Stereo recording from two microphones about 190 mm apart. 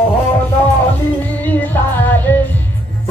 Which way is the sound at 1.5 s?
10° left (ahead or behind).